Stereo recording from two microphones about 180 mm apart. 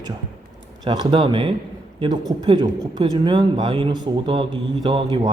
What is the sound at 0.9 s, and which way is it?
Speech, 25° right (ahead or behind).